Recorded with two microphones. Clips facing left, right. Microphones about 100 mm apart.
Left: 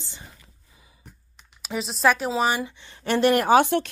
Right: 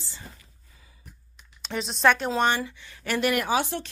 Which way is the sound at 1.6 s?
5° left (ahead or behind).